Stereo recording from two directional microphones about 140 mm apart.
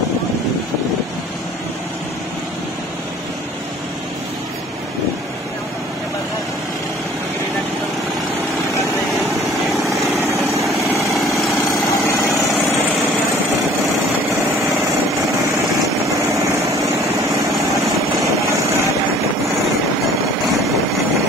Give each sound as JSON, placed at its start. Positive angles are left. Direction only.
{"t": 9.5, "sound": "vehicle", "side_deg": 0}
{"t": 10.8, "sound": "vehicle", "side_deg": -20}
{"t": 11.4, "sound": "engine", "side_deg": 0}
{"t": 12.2, "sound": "vehicle", "side_deg": 25}
{"t": 16.5, "sound": "vehicle", "side_deg": -20}
{"t": 17.0, "sound": "vehicle", "side_deg": 0}
{"t": 18.2, "sound": "vehicle", "side_deg": -20}